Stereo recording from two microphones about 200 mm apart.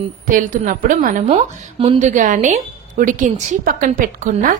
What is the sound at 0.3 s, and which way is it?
A woman's voice, 40° right (ahead or behind).